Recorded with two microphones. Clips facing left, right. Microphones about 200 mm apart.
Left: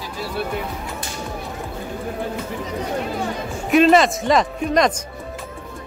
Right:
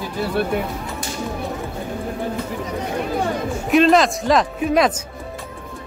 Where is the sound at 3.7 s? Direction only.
Centre (ahead or behind).